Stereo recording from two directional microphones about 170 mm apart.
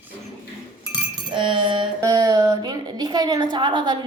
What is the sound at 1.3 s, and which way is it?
A woman's voice, 30° right (ahead or behind).